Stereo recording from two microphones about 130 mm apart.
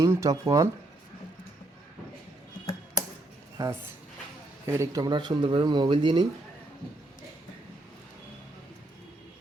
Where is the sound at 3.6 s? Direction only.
30° right (ahead or behind).